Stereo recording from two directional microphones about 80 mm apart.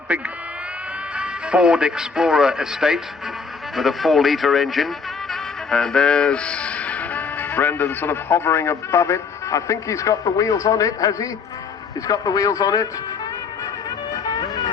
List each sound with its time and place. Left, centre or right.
0.1 s a man's voice: centre
5.3 s music: centre; by 11.3 s left
12.0 s speech: left